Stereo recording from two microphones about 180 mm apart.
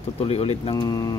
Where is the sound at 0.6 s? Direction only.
25° left (ahead or behind).